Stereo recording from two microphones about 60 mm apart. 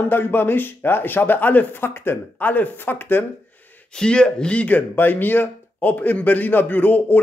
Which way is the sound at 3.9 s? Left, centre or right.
Centre.